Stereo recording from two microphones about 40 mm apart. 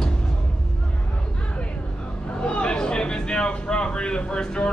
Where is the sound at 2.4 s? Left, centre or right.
Left.